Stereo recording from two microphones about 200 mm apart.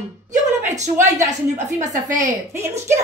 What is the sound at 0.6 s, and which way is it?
A woman's voice, 35° right (ahead or behind).